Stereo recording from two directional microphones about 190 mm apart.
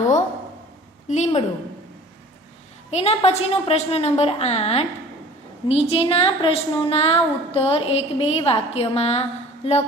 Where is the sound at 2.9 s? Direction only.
35° left (ahead or behind).